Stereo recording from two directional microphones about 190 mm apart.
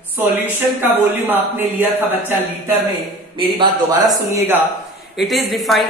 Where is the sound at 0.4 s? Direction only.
10° right (ahead or behind).